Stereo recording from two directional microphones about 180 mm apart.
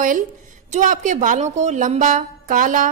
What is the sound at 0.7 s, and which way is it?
A woman's voice, 45° right (ahead or behind).